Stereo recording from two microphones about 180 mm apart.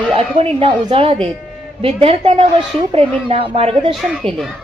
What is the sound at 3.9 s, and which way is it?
Speech, centre (ahead or behind).